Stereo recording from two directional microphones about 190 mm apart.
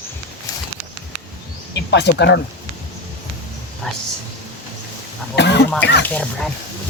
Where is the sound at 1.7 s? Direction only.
65° left (ahead or behind).